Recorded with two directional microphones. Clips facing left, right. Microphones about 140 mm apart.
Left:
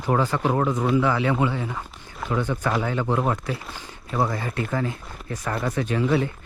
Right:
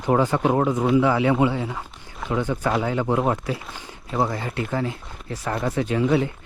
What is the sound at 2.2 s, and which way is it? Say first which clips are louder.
Speech: right 1 dB; centre (ahead or behind).